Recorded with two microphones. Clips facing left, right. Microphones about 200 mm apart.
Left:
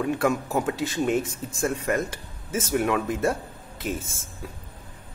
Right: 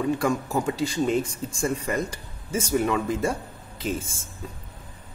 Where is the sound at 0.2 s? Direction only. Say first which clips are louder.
Left 1 dB; 5° left (ahead or behind).